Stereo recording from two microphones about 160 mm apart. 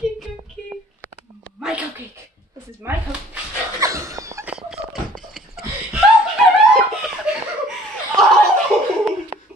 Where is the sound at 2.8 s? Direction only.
15° right (ahead or behind).